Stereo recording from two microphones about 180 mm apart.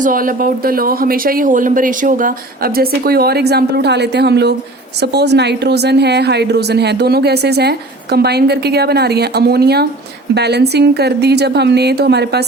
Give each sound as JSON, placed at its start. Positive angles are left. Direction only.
{"t": 0.0, "sound": "a woman's voice", "side_deg": -50}